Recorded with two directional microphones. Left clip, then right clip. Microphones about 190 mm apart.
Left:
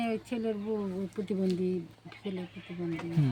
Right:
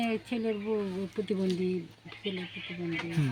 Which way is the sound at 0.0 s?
10° left (ahead or behind).